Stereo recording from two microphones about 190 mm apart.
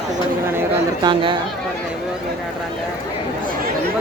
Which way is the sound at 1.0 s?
25° right (ahead or behind).